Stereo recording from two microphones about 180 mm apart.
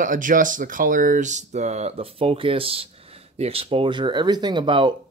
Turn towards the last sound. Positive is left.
turn(degrees=-25)  # may be behind; listen again after turning